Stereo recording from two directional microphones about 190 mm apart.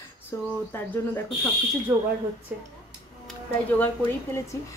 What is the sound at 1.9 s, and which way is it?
Speech, 15° right (ahead or behind).